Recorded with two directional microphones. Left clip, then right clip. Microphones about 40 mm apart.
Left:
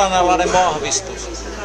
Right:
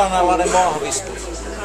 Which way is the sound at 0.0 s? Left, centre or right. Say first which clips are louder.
Left 1 dB; left.